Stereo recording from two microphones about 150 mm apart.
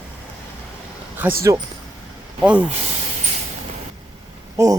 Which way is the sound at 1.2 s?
10° right (ahead or behind).